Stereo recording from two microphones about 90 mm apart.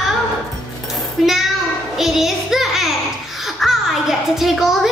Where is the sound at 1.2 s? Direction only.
Centre (ahead or behind).